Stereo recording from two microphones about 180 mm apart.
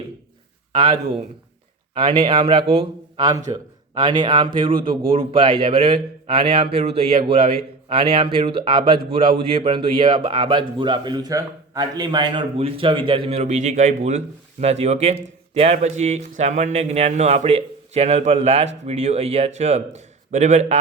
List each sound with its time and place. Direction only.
0.7 s a man's voice: 30° right (ahead or behind)
4.8 s speech: 50° right (ahead or behind)
5.1 s a man's voice: 30° right (ahead or behind)